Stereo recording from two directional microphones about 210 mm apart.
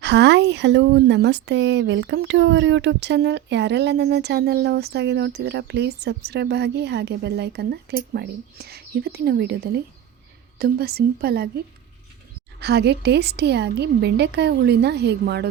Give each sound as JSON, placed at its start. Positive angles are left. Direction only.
{"t": 0.0, "sound": "speech", "side_deg": -55}
{"t": 12.5, "sound": "speech", "side_deg": -50}